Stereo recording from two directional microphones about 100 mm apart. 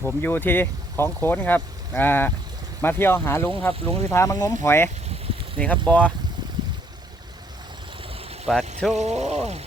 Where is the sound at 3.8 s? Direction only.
70° right (ahead or behind).